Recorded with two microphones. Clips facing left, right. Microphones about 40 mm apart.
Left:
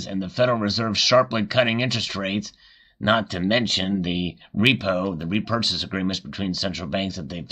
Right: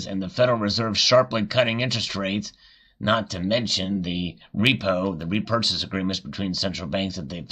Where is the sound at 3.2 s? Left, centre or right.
Left.